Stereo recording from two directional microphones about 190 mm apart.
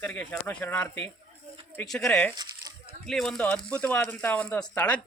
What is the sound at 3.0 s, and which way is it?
Speech, centre (ahead or behind).